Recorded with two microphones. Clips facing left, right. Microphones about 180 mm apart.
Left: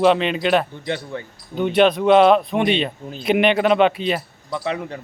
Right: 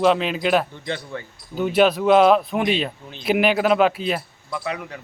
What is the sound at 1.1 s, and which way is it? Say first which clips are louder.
Speech: left 2 dB; 20° left (ahead or behind).